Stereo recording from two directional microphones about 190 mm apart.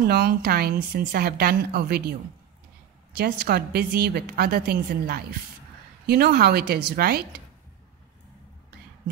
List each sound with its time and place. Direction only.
0.0 s speech: 55° right (ahead or behind)
3.2 s speech: 55° right (ahead or behind)